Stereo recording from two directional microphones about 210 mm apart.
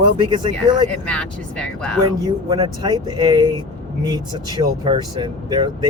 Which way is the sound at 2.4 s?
20° right (ahead or behind).